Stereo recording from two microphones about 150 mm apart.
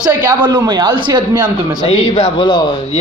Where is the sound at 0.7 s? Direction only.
30° right (ahead or behind).